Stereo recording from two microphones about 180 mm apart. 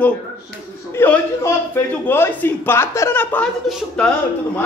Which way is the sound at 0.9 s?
10° left (ahead or behind).